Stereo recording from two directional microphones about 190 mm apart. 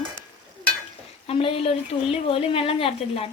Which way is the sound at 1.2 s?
30° left (ahead or behind).